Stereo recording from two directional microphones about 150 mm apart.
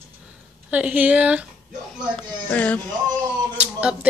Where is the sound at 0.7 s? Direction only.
10° right (ahead or behind).